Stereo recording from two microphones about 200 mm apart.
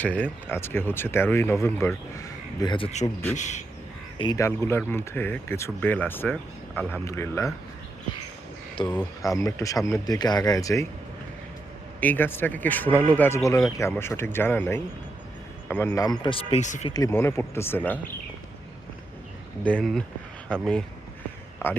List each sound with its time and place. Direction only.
0.0 s speech: 10° left (ahead or behind); by 3.6 s 35° left (ahead or behind)
4.2 s speech: 20° left (ahead or behind)
8.8 s speech: 25° left (ahead or behind)
11.9 s speech: 10° left (ahead or behind)
16.0 s speech: 20° left (ahead or behind); by 16.9 s 35° left (ahead or behind)
16.9 s speech: 15° left (ahead or behind)
19.6 s speech: 5° left (ahead or behind)